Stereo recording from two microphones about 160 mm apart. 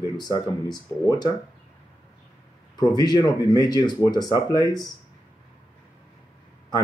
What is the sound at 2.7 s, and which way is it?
Speech, 25° left (ahead or behind).